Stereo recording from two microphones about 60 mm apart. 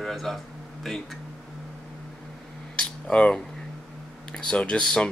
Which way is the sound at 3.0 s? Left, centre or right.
Centre.